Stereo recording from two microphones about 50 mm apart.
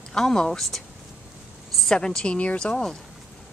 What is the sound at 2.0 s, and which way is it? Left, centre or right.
Speech, centre.